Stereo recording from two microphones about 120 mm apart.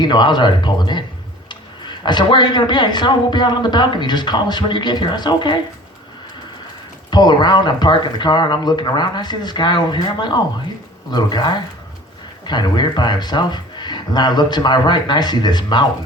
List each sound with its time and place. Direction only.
0.0 s a woman's voice: 40° left (ahead or behind)
7.1 s a woman's voice: 35° left (ahead or behind)